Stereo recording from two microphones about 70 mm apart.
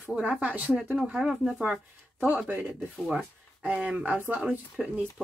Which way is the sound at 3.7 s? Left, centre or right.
Right.